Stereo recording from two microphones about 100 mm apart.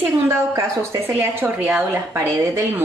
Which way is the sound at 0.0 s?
25° right (ahead or behind).